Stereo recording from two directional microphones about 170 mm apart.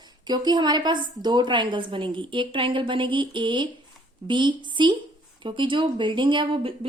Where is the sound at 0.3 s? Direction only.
25° right (ahead or behind).